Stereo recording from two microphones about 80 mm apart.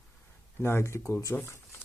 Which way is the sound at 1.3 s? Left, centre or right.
Centre.